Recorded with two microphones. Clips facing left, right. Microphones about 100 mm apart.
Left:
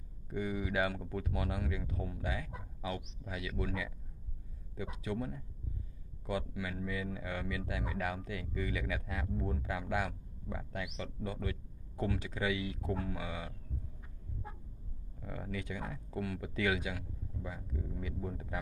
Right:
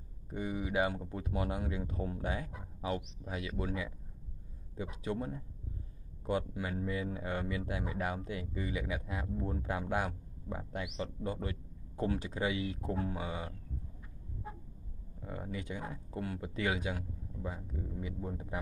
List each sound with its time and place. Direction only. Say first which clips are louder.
0.3 s speech: even; 25° right (ahead or behind)
15.2 s speech: even; 25° right (ahead or behind)